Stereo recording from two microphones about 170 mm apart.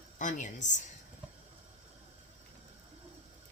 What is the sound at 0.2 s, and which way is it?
Speech, 50° left (ahead or behind).